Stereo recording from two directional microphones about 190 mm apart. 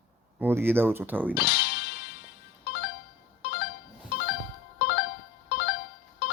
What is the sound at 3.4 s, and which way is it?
Music, 55° left (ahead or behind).